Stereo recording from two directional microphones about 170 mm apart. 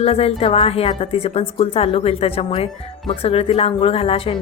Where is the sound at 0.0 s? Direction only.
35° left (ahead or behind).